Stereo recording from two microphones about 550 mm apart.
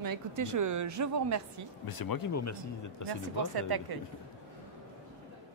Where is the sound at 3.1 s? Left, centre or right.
Right.